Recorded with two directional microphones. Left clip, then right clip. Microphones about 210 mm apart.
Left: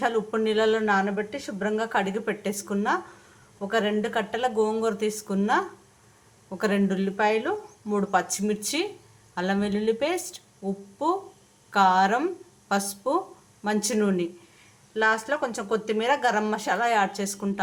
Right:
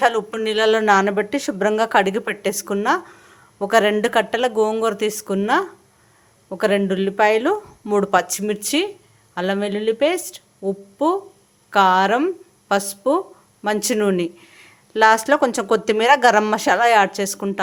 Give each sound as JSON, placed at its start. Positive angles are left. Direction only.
{"t": 0.0, "sound": "a woman's voice", "side_deg": -40}